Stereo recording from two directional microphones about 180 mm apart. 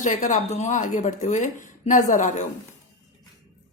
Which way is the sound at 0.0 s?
45° left (ahead or behind).